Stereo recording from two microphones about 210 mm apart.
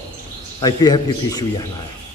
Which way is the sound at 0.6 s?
20° left (ahead or behind).